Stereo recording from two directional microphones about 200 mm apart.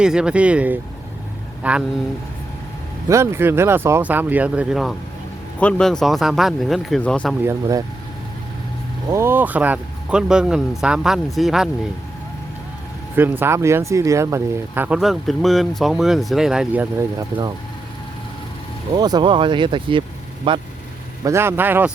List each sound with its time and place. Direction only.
0.0 s speech: 5° right (ahead or behind)
3.1 s speech: 15° right (ahead or behind); by 7.3 s 5° left (ahead or behind)
7.4 s speech: 15° right (ahead or behind)
9.0 s speech: 15° right (ahead or behind)
13.1 s speech: 10° right (ahead or behind)
18.9 s speech: 20° right (ahead or behind)
21.2 s speech: 10° right (ahead or behind)